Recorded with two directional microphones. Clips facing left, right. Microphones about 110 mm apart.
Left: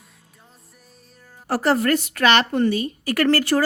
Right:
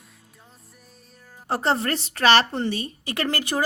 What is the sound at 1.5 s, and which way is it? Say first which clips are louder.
Speech: left 4 dB; 25° right (ahead or behind).